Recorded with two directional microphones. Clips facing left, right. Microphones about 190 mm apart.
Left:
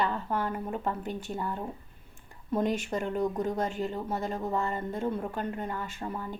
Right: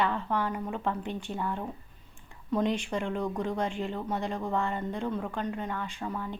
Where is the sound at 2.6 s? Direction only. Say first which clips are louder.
Even; 45° left (ahead or behind).